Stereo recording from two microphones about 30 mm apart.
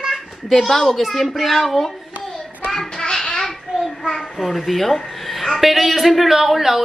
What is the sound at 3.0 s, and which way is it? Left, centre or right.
Child singing, left.